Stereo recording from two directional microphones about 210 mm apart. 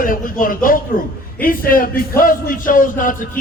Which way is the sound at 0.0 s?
40° left (ahead or behind).